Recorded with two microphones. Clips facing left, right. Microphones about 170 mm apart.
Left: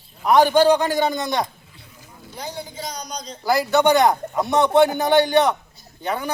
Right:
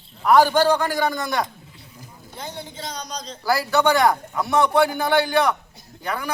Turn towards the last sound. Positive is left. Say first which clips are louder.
# left 3 dB
turn(degrees=25)  # may be behind; listen again after turning